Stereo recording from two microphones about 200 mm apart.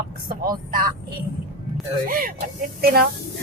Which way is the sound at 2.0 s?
45° right (ahead or behind).